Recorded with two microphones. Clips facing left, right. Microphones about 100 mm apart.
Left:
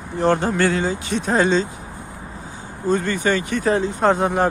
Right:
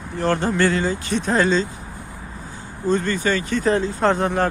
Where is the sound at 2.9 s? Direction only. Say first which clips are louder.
Left 1 dB; 15° left (ahead or behind).